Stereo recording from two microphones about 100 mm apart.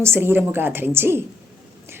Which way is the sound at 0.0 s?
25° right (ahead or behind).